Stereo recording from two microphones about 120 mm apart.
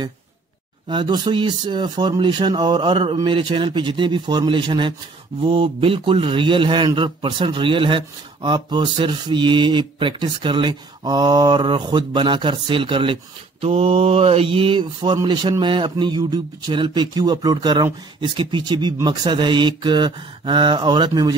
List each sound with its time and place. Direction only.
0.8 s speech: 40° right (ahead or behind)